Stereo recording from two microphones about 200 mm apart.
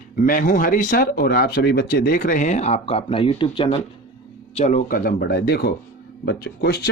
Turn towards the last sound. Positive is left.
turn(degrees=55)  # may be behind; listen again after turning